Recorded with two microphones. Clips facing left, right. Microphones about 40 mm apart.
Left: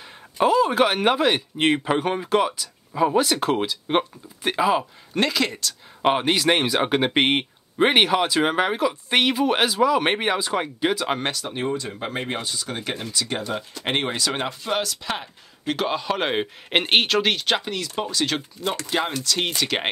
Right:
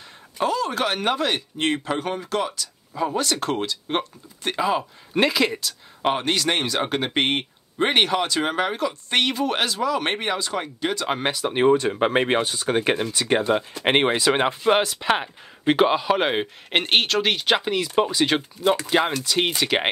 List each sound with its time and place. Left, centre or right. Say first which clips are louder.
0.4 s speech: left 5 dB; centre
5.1 s speech: right 2 dB; centre
6.0 s speech: left 3 dB; centre
11.1 s speech: right 2 dB; centre
11.5 s speech: right 8 dB; right
16.0 s speech: right 2 dB; centre